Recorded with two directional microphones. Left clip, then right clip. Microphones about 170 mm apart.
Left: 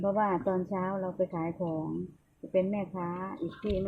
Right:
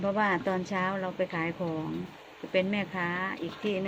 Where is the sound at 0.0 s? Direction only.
10° right (ahead or behind).